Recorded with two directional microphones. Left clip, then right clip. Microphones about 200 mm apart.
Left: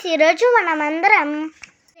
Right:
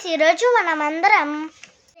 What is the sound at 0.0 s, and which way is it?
A child's voice, 20° left (ahead or behind).